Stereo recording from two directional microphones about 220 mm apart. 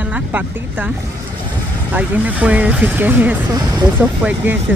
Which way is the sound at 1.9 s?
5° right (ahead or behind).